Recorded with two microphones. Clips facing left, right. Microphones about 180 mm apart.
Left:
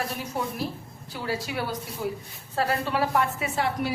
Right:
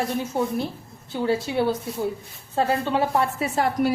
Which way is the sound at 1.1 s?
25° right (ahead or behind).